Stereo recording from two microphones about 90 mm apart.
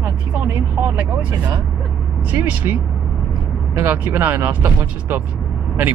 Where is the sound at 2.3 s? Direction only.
20° right (ahead or behind).